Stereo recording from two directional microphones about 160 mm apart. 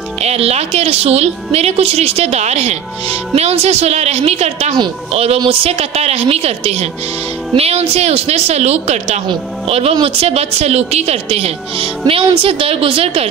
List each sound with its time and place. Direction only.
0.2 s a woman's voice: 40° right (ahead or behind)